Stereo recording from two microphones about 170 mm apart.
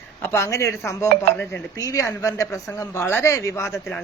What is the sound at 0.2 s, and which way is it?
A man's voice, 15° left (ahead or behind).